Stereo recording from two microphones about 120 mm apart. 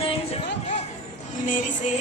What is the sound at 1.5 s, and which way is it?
Music, 90° left.